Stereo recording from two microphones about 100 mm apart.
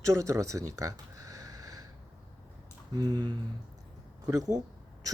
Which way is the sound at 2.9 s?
45° right (ahead or behind).